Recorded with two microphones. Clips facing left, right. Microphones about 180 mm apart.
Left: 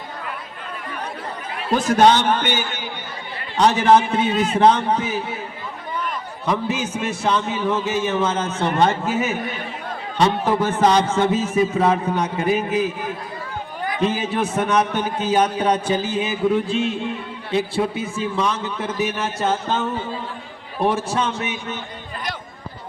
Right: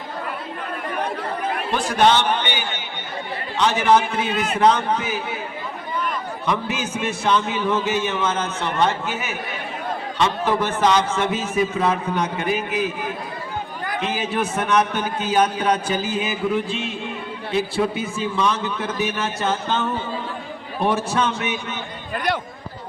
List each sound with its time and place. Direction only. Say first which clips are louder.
1.7 s a man's voice: left 3 dB; 45° left (ahead or behind)
6.4 s a man's voice: left 3 dB; 35° left (ahead or behind)
14.0 s a man's voice: left 3 dB; 35° left (ahead or behind)